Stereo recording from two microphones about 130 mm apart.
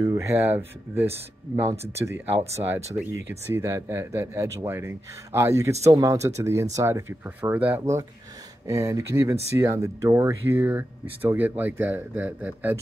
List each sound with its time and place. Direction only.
0.0 s a man's voice: 25° right (ahead or behind)